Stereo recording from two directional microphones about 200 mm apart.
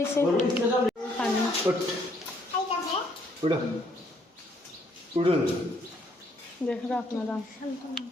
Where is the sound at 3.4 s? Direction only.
25° right (ahead or behind).